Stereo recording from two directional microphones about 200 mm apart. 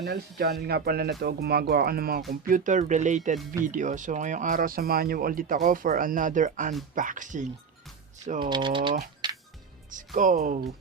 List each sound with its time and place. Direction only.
0.0 s speech: 55° right (ahead or behind)
8.4 s speech: 25° right (ahead or behind)
9.2 s music: 20° right (ahead or behind)
9.9 s speech: 40° right (ahead or behind)